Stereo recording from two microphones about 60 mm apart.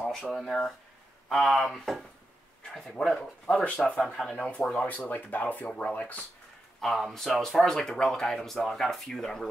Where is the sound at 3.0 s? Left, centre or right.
Centre.